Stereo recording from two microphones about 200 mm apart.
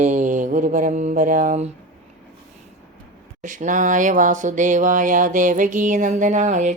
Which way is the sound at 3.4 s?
40° right (ahead or behind).